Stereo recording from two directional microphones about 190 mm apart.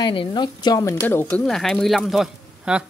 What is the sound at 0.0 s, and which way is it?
Speech, 25° left (ahead or behind).